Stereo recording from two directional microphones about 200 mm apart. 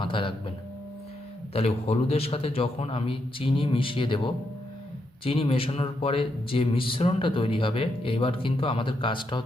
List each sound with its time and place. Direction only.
0.0 s speech: 25° left (ahead or behind)
1.5 s speech: 30° left (ahead or behind)
5.2 s speech: 30° left (ahead or behind)